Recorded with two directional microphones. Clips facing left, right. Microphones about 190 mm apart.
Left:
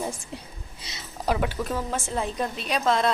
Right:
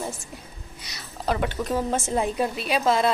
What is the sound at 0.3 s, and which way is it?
Speech, 25° left (ahead or behind).